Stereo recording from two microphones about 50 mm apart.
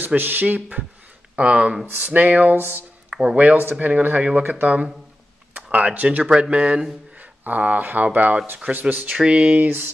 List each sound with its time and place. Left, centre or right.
0.0 s speech: right
1.3 s speech: right
3.1 s a sound: centre
3.8 s speech: right
9.1 s speech: right